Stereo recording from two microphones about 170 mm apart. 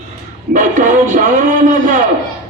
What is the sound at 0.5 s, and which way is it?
Speech, 50° right (ahead or behind).